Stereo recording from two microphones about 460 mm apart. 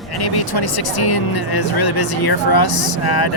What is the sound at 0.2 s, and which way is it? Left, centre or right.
Speech, left.